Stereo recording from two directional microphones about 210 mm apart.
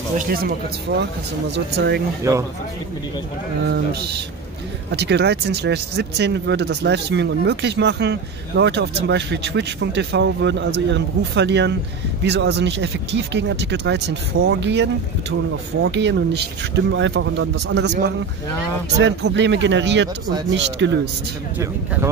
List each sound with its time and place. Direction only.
0.3 s speech: 50° right (ahead or behind)
3.6 s speech: 50° right (ahead or behind)
14.4 s speech: 65° right (ahead or behind)
18.9 s speech: 55° right (ahead or behind)